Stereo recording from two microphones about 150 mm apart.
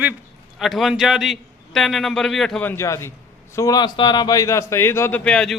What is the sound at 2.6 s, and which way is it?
A man's voice, 15° left (ahead or behind).